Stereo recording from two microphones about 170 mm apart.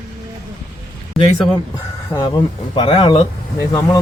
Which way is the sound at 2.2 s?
30° left (ahead or behind).